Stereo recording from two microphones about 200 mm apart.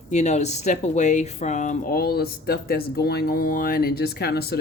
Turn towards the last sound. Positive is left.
turn(degrees=50)  # may be behind; listen again after turning